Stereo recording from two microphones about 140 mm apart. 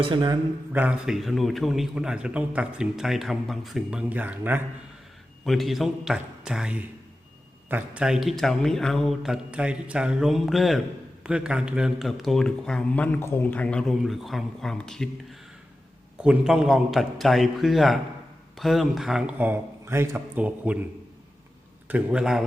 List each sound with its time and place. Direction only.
0.0 s speech: 30° right (ahead or behind)
0.7 s speech: 10° right (ahead or behind)
4.1 s a man's voice: 10° right (ahead or behind)
5.5 s speech: centre (ahead or behind)
16.1 s a man's voice: 5° right (ahead or behind)
21.8 s speech: 10° right (ahead or behind)